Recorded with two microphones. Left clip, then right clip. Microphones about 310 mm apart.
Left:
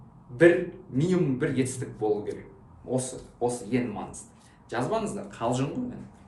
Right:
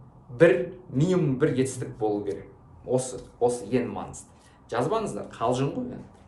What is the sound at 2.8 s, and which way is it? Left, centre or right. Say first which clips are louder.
Speech: right 4 dB; centre.